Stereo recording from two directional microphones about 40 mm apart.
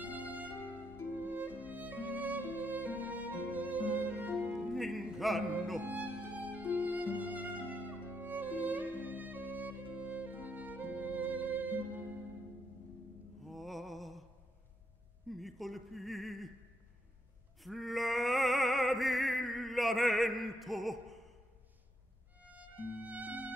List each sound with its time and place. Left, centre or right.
0.0 s music: right
4.6 s music: centre
5.9 s speech: right
6.3 s music: right
13.4 s music: centre
15.2 s a sound: centre
17.6 s music: centre
22.4 s violin: right